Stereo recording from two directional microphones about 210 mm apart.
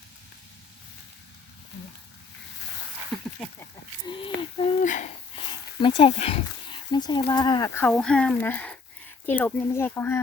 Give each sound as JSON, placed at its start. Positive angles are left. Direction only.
{"t": 3.1, "sound": "speech", "side_deg": 0}
{"t": 4.0, "sound": "a sound", "side_deg": 25}
{"t": 4.6, "sound": "wheeze", "side_deg": 35}
{"t": 5.5, "sound": "speech", "side_deg": 25}
{"t": 7.9, "sound": "speech", "side_deg": 5}